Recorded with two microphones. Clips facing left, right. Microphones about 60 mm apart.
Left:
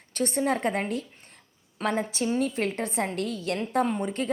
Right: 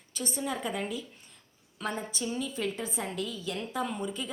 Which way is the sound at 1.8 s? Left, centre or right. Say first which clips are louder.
Left 7 dB; left.